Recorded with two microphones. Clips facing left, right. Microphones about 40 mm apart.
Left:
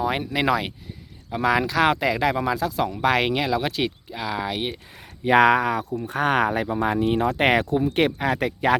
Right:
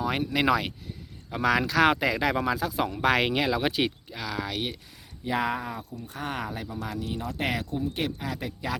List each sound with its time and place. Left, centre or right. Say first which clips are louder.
0.0 s speech: left 3 dB; centre
4.1 s speech: left 5 dB; centre
5.2 s speech: left 12 dB; left
6.0 s speech: left 12 dB; left